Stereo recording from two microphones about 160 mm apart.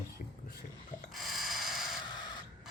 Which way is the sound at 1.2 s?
Centre (ahead or behind).